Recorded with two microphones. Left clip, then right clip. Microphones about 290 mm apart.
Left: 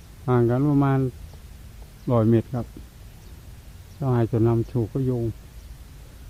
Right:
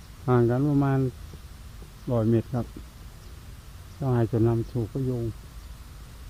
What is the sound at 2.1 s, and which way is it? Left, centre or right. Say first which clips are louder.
Speech: left 4 dB; centre.